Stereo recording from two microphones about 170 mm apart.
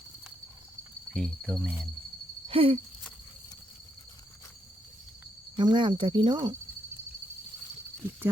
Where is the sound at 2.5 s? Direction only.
35° right (ahead or behind).